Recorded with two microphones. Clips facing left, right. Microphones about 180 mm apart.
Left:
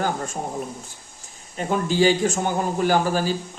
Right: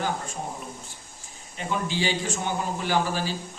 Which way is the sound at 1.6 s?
45° left (ahead or behind).